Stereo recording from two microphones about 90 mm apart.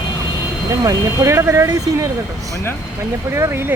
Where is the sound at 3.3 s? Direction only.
30° right (ahead or behind).